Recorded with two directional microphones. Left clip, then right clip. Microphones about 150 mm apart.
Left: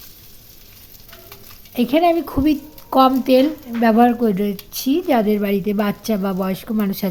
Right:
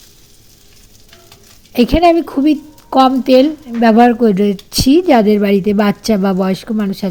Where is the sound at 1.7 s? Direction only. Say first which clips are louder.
Right 6 dB; 35° right (ahead or behind).